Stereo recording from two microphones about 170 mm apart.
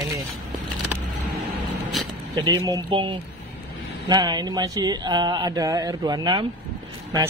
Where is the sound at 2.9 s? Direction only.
25° right (ahead or behind).